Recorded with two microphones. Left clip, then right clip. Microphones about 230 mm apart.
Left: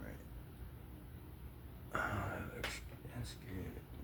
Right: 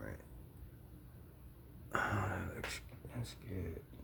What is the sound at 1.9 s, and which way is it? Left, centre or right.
Speech, right.